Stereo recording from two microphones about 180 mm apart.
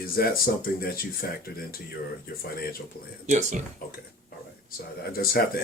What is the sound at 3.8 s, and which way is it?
Speech, 55° left (ahead or behind).